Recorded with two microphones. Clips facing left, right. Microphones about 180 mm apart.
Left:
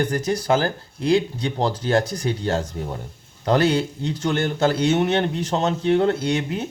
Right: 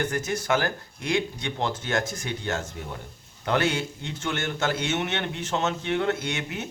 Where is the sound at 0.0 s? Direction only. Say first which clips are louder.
Left 5 dB; 35° left (ahead or behind).